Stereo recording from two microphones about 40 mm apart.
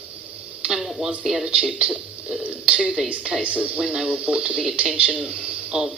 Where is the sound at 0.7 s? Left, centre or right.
Centre.